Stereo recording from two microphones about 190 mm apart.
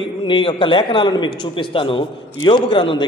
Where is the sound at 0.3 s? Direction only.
25° left (ahead or behind).